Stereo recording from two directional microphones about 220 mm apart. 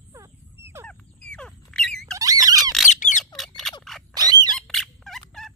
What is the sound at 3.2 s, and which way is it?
Squawk, centre (ahead or behind).